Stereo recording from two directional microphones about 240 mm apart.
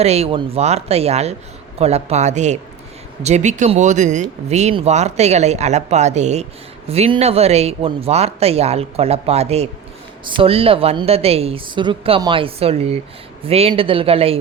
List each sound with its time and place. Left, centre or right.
0.0 s speech: right